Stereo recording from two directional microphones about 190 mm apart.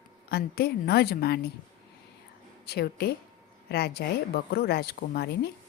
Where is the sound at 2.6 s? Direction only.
55° left (ahead or behind).